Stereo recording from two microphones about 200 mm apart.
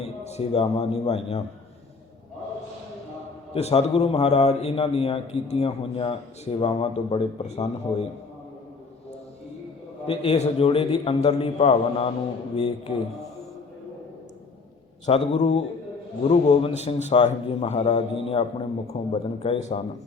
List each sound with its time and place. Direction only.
0.0 s a man's voice: 30° left (ahead or behind)
3.5 s a man's voice: 30° left (ahead or behind)
10.1 s a man's voice: 30° left (ahead or behind)
15.0 s a man's voice: 35° left (ahead or behind)